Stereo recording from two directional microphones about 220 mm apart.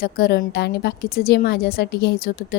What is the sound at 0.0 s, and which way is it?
A woman's voice, 45° left (ahead or behind).